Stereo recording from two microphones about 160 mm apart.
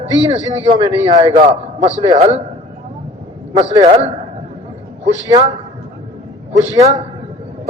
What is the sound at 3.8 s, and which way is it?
Speech, 45° right (ahead or behind).